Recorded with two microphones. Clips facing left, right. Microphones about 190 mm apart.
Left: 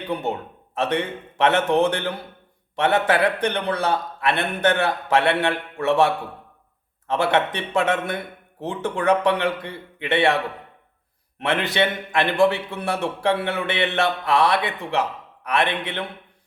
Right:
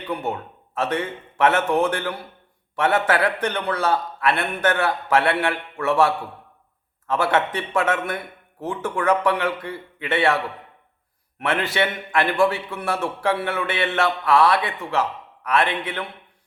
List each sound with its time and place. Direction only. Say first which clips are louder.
0.1 s a man's voice: left 1 dB; 20° left (ahead or behind)